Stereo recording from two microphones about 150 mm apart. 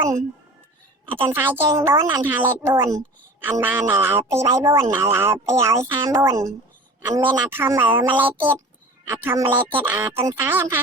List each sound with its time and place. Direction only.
1.0 s a woman's voice: 15° right (ahead or behind)